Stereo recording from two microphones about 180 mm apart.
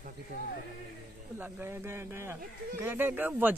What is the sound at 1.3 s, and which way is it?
Speech, 10° right (ahead or behind).